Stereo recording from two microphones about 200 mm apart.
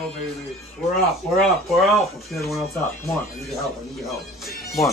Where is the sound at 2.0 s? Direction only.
Centre (ahead or behind).